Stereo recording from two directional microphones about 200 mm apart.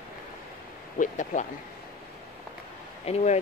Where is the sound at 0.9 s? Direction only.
40° left (ahead or behind).